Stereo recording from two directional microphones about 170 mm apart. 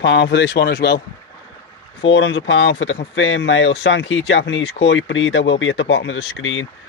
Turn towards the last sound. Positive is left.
turn(degrees=90)